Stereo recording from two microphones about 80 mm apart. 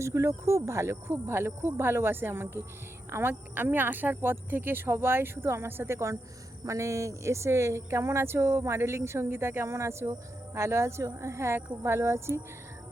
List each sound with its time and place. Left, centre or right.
0.0 s speech: right